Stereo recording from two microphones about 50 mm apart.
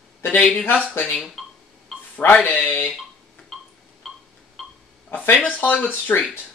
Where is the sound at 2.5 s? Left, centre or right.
Left.